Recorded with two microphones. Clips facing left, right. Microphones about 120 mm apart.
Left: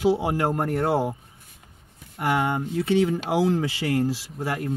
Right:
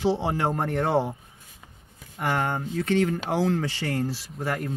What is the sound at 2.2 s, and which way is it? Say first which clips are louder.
Speech: left 3 dB; 10° left (ahead or behind).